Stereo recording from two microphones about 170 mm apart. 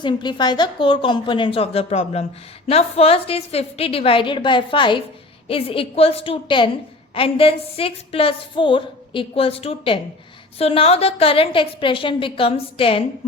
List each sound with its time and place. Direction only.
0.0 s a woman's voice: 25° left (ahead or behind)